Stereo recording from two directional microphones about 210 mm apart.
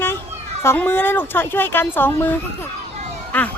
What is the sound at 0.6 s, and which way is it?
Speech, 10° left (ahead or behind).